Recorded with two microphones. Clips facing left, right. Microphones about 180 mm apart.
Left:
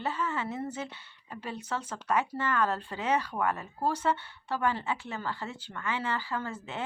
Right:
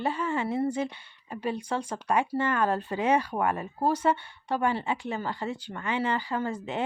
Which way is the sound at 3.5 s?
25° right (ahead or behind).